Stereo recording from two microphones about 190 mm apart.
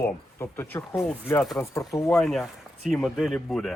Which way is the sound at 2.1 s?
Centre (ahead or behind).